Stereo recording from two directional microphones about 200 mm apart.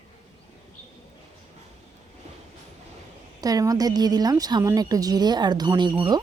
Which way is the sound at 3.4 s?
20° right (ahead or behind).